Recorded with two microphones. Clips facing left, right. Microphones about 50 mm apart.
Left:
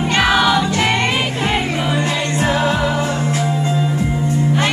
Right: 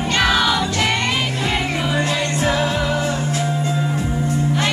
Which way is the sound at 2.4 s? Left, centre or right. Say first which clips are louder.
Left 3 dB; left.